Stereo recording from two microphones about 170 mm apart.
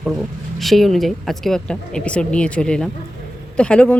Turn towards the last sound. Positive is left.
turn(degrees=5)  # may be behind; listen again after turning